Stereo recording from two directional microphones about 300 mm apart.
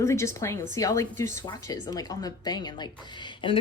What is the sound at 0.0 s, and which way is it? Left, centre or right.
Speech, centre.